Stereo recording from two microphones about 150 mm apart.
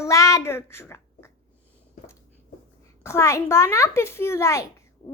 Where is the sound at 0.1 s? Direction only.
20° left (ahead or behind).